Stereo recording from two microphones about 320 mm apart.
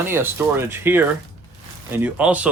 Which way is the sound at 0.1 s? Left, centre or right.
Centre.